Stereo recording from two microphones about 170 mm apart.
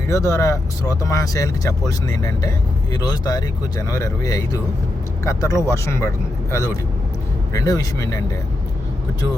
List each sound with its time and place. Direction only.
0.1 s speech: 15° left (ahead or behind)